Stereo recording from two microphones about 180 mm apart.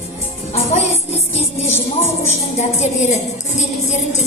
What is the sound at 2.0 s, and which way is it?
A woman's voice, 40° left (ahead or behind).